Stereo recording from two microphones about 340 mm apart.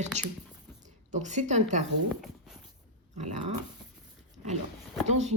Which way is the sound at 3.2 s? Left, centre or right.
Centre.